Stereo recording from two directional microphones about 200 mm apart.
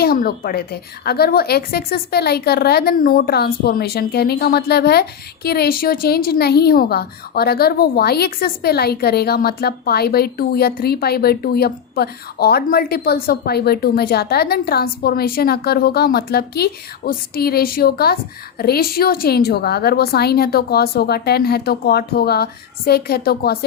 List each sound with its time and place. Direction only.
0.0 s a woman's voice: 50° left (ahead or behind)